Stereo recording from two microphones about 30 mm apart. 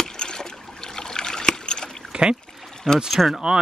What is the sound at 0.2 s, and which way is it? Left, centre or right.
Trickle, left.